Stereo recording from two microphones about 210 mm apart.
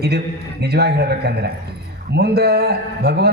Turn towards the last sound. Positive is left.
turn(degrees=-50)  # may be behind; listen again after turning